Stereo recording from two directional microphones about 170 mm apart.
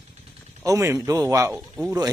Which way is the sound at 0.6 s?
20° right (ahead or behind).